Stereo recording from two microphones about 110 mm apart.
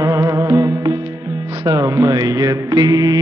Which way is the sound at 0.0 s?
30° right (ahead or behind).